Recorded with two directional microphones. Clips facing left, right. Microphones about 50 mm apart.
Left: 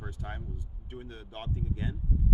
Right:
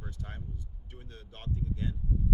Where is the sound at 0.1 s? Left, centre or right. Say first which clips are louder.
Left 3 dB; centre.